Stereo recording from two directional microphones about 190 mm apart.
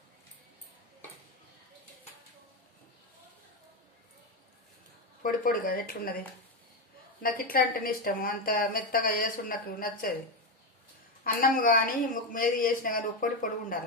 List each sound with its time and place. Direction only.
5.2 s a woman's voice: 45° left (ahead or behind)
11.2 s a woman's voice: 50° left (ahead or behind)